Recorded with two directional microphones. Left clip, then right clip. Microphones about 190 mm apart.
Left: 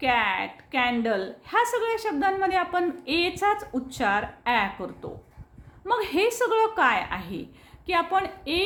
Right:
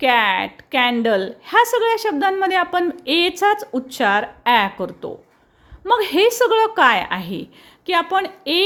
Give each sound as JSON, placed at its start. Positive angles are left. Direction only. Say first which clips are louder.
{"t": 0.0, "sound": "a woman's voice", "louder": "right 8 dB", "side_deg": -40}